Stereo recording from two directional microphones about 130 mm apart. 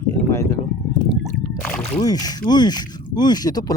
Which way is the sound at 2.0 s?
30° left (ahead or behind).